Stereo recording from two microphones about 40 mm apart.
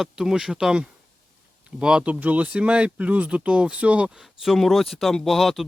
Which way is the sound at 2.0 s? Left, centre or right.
Right.